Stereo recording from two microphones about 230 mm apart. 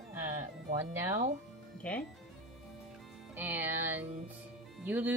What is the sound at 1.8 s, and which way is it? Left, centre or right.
Speech, centre.